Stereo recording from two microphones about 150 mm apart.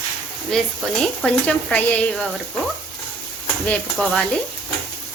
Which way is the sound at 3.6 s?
5° left (ahead or behind).